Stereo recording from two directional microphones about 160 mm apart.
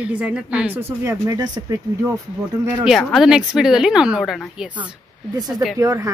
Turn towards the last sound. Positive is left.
turn(degrees=-20)  # may be behind; listen again after turning